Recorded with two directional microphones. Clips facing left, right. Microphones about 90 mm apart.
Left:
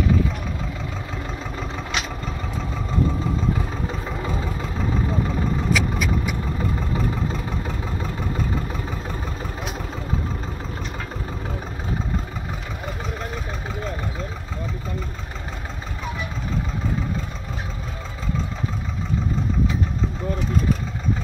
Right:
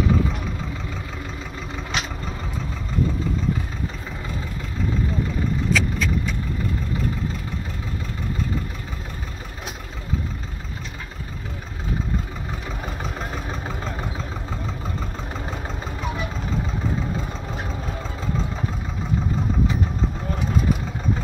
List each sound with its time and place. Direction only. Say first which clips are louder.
5.7 s vehicle: right 1 dB; 10° left (ahead or behind)